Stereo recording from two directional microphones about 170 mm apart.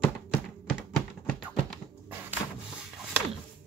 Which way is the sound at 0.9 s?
5° left (ahead or behind).